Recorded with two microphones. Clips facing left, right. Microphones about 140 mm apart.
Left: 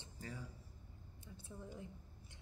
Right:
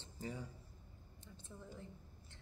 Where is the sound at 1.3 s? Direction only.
10° left (ahead or behind).